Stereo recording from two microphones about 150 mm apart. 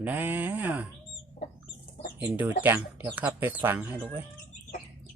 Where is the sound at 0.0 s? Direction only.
10° right (ahead or behind).